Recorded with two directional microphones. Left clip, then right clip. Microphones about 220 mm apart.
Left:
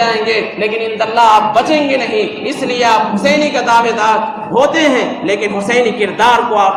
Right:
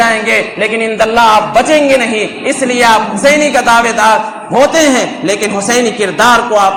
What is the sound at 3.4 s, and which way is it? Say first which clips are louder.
A man's voice: right 3 dB; 50° right (ahead or behind).